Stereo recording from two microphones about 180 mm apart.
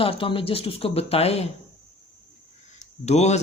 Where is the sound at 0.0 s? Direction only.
30° left (ahead or behind).